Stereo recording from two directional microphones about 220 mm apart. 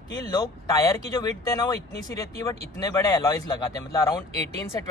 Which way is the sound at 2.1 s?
15° left (ahead or behind).